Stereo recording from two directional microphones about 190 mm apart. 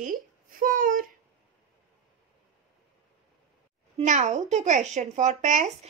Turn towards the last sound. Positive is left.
turn(degrees=-40)  # may be behind; listen again after turning